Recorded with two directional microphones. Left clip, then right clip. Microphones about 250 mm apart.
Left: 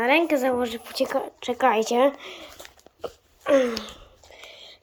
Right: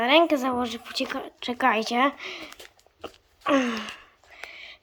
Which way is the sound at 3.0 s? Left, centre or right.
Centre.